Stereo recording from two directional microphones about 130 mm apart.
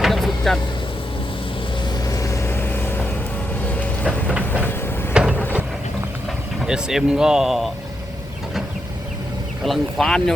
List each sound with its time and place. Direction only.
0.0 s vehicle: centre (ahead or behind)
2.0 s vehicle: 25° left (ahead or behind)
4.0 s train: 10° right (ahead or behind)
5.1 s vehicle: 5° right (ahead or behind)
6.7 s speech: 5° right (ahead or behind)
9.6 s speech: centre (ahead or behind)